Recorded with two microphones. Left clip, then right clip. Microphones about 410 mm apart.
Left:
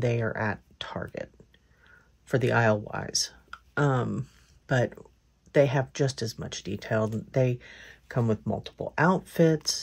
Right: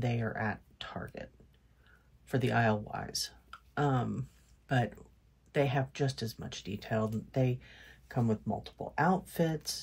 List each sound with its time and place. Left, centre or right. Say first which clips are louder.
0.0 s speech: left 7 dB; centre
2.2 s speech: left 6 dB; centre